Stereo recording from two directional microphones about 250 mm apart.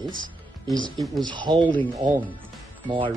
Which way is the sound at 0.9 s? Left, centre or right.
Centre.